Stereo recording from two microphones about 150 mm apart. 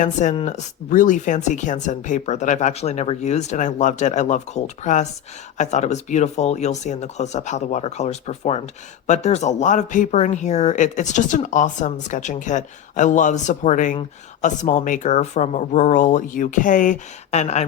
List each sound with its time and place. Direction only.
0.0 s speech: 55° left (ahead or behind)